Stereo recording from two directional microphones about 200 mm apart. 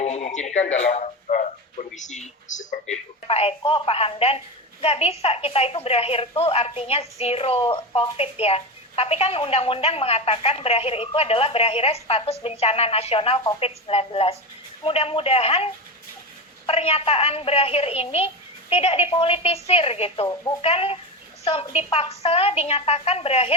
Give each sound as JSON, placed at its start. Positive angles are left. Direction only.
{"t": 0.0, "sound": "a woman's voice", "side_deg": 35}